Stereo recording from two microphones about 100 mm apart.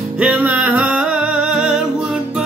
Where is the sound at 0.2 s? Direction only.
15° right (ahead or behind).